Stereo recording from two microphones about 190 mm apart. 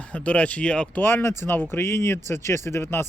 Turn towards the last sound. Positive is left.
turn(degrees=15)  # may be behind; listen again after turning